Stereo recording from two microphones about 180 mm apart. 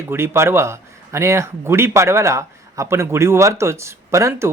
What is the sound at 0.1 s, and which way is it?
Speech, 15° right (ahead or behind).